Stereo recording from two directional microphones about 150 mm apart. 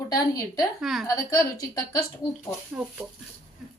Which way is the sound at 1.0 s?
25° left (ahead or behind).